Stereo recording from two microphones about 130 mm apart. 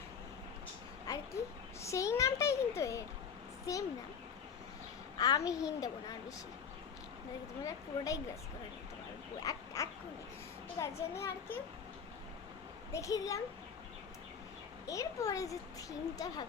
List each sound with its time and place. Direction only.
1.1 s a sound: 25° left (ahead or behind)
1.8 s a child's voice: 25° left (ahead or behind)
5.1 s a child's voice: 30° left (ahead or behind)
7.6 s a child's voice: 25° left (ahead or behind)
9.4 s a child's voice: 25° left (ahead or behind)
12.9 s a child's voice: 25° left (ahead or behind)
14.8 s a child's voice: 25° left (ahead or behind)